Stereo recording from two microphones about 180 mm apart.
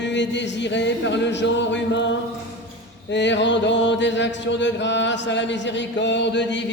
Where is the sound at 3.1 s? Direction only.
80° left.